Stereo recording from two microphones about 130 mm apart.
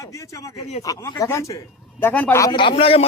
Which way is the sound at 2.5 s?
40° left (ahead or behind).